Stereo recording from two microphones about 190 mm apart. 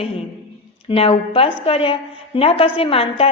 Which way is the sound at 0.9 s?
30° left (ahead or behind).